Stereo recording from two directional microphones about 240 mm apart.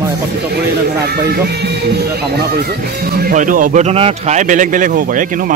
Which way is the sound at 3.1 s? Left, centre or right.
Right.